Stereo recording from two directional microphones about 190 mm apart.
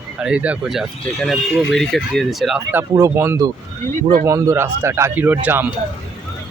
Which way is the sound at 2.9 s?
15° right (ahead or behind).